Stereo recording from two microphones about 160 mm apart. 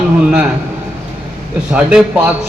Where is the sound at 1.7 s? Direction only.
5° right (ahead or behind).